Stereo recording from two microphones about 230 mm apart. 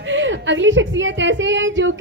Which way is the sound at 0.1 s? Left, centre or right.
Right.